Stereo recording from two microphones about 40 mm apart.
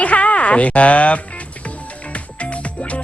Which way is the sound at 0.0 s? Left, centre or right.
Left.